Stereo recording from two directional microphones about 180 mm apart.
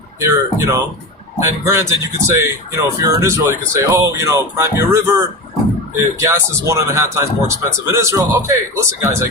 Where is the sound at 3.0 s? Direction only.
20° right (ahead or behind).